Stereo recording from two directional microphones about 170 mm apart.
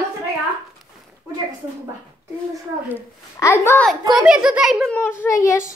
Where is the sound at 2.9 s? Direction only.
15° left (ahead or behind).